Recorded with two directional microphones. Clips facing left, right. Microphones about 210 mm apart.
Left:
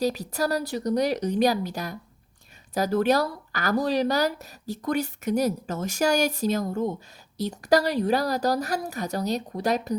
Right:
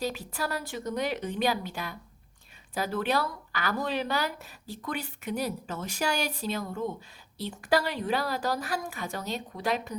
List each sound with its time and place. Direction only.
0.0 s speech: 40° left (ahead or behind)